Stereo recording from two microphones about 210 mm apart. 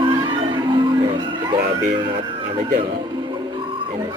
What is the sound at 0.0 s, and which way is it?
Music, 20° right (ahead or behind).